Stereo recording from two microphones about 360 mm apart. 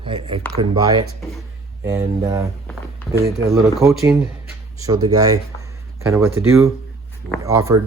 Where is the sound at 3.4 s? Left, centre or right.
Centre.